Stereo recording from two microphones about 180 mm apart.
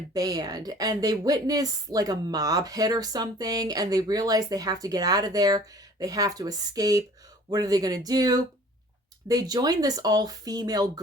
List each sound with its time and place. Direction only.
0.1 s a woman's voice: 20° right (ahead or behind)